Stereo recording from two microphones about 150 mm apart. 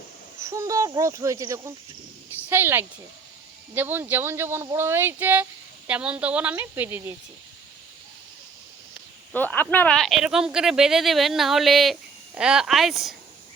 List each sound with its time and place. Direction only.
0.4 s speech: 20° right (ahead or behind)
9.3 s speech: 10° left (ahead or behind)